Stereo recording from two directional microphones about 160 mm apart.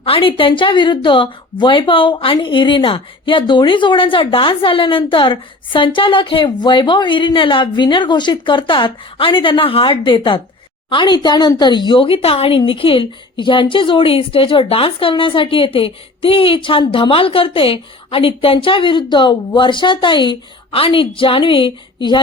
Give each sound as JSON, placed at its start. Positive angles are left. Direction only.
{"t": 0.0, "sound": "a woman's voice", "side_deg": 35}